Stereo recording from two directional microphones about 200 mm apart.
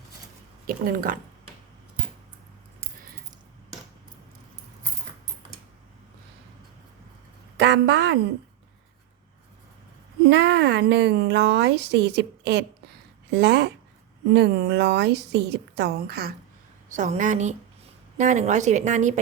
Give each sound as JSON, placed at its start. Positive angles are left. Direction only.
{"t": 0.7, "sound": "speech", "side_deg": -45}
{"t": 7.5, "sound": "a woman's voice", "side_deg": -55}
{"t": 10.2, "sound": "a woman's voice", "side_deg": -55}
{"t": 16.9, "sound": "speech", "side_deg": -40}